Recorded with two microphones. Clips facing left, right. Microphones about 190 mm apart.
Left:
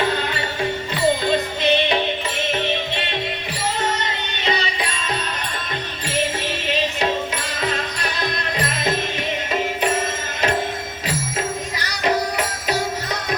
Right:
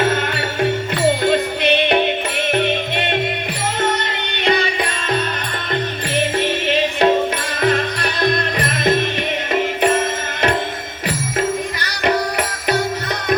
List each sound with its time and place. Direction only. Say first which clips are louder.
0.0 s music: right 4 dB; 60° right (ahead or behind)
4.4 s music: right 6 dB; 55° right (ahead or behind)
6.7 s music: right 6 dB; 60° right (ahead or behind)
12.0 s music: right 2 dB; 60° right (ahead or behind)